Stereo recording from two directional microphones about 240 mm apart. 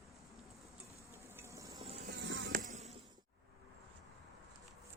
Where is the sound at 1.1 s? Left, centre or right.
Centre.